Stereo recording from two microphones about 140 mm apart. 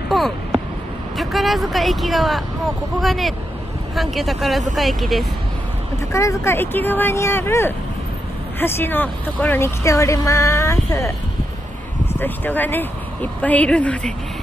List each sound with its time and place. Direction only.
0.1 s a sound: centre (ahead or behind)
1.1 s speech: centre (ahead or behind)
6.1 s speech: 20° left (ahead or behind)